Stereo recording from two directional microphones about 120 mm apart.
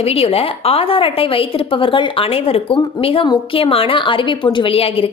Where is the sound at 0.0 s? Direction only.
55° left (ahead or behind).